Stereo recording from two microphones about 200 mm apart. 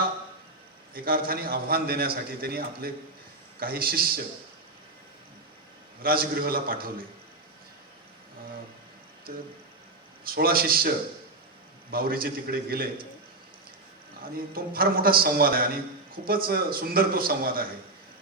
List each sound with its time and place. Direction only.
0.9 s a man's voice: 45° right (ahead or behind)
6.0 s a man's voice: 50° right (ahead or behind)
9.3 s a man's voice: 45° right (ahead or behind)
14.2 s a man's voice: 45° right (ahead or behind)